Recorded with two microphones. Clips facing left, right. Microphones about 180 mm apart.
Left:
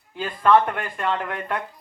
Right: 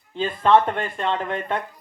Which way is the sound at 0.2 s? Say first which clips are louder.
Right 1 dB; 25° right (ahead or behind).